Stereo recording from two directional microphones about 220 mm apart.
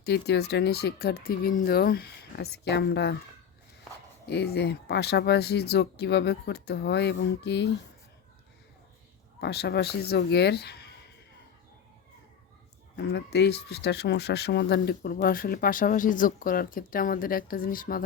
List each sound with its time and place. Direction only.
0.0 s speech: 50° left (ahead or behind)
4.3 s speech: 50° left (ahead or behind)
9.4 s speech: 50° left (ahead or behind)
13.0 s speech: 50° left (ahead or behind)